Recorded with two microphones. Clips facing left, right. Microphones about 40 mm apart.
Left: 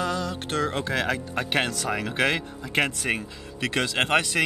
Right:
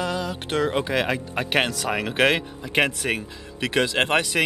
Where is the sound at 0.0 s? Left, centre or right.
Centre.